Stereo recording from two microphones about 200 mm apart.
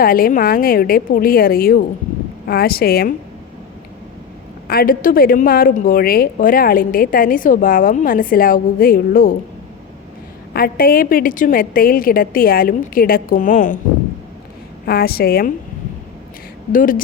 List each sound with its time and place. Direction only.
0.0 s a woman's voice: 45° left (ahead or behind)
4.7 s a woman's voice: 45° left (ahead or behind)
10.5 s a woman's voice: 45° left (ahead or behind)
14.8 s a woman's voice: 50° left (ahead or behind)
16.7 s a woman's voice: 45° left (ahead or behind)